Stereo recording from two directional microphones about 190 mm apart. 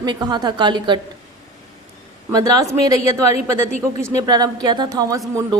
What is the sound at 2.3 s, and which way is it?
Speech, 20° right (ahead or behind).